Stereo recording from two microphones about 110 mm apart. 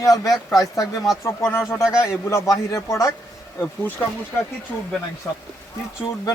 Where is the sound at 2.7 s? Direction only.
30° left (ahead or behind).